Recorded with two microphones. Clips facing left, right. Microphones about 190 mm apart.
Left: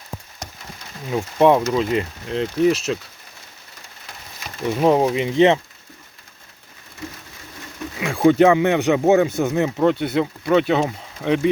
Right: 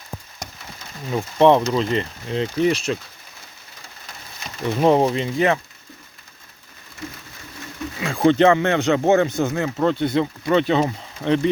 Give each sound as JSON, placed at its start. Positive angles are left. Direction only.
{"t": 1.1, "sound": "speech", "side_deg": 5}
{"t": 4.8, "sound": "speech", "side_deg": 5}
{"t": 5.2, "sound": "speech", "side_deg": 25}
{"t": 8.1, "sound": "speech", "side_deg": 5}